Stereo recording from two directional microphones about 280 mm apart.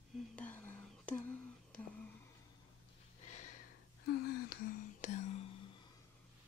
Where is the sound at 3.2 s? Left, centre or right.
Left.